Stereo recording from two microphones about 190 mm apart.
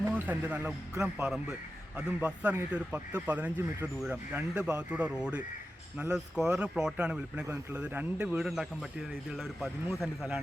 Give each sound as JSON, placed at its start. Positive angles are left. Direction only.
{"t": 0.0, "sound": "a man's voice", "side_deg": -10}